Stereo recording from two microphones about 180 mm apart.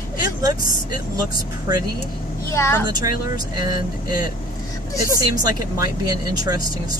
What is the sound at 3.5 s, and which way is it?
Speech, 20° right (ahead or behind).